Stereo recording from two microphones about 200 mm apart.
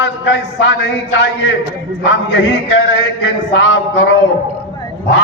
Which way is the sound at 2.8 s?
70° left (ahead or behind).